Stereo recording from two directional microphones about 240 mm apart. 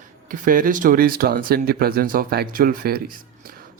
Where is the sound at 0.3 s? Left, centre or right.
Right.